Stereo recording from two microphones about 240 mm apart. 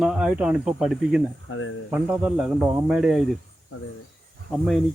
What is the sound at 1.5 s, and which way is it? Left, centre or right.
Speech, left.